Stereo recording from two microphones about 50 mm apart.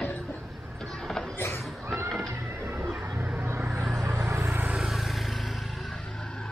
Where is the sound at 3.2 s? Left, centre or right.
Right.